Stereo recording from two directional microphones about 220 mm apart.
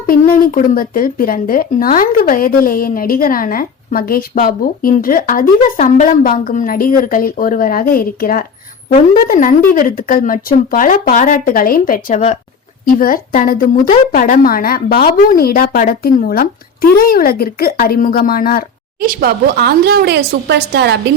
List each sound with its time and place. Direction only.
0.1 s speech: 40° left (ahead or behind)
18.9 s speech: 40° right (ahead or behind)